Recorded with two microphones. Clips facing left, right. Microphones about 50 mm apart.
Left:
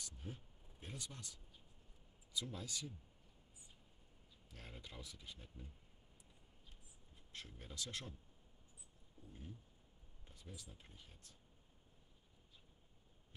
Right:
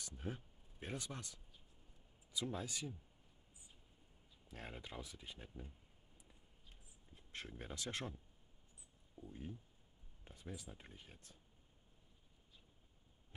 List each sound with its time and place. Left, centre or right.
0.0 s a sound: right
2.3 s speech: right
4.5 s speech: right
7.3 s speech: right
9.2 s speech: centre
10.3 s speech: right